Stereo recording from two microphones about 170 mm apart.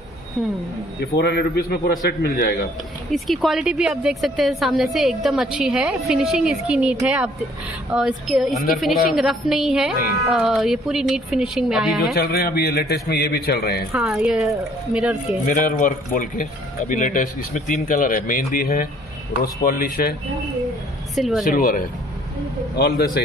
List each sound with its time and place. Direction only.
1.1 s a man's voice: 70° left (ahead or behind)
3.1 s a woman's voice: centre (ahead or behind)
12.2 s a man's voice: 65° left (ahead or behind)
13.9 s a woman's voice: 5° right (ahead or behind)
15.2 s speech: 50° left (ahead or behind)
21.1 s speech: centre (ahead or behind)
21.5 s a man's voice: 60° left (ahead or behind)